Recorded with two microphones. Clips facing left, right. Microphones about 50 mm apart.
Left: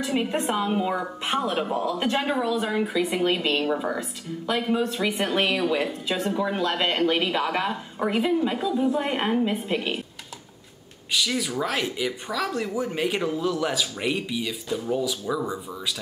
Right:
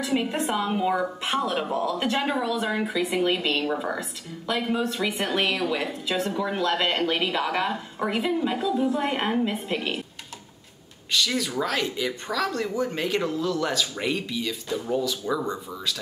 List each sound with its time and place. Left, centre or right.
0.1 s speech: centre
1.2 s a woman's voice: centre
9.5 s speech: centre
11.1 s speech: centre